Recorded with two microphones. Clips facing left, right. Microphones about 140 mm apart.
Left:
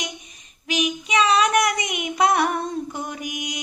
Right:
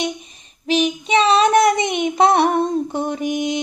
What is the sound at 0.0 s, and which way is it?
Child singing, 30° right (ahead or behind).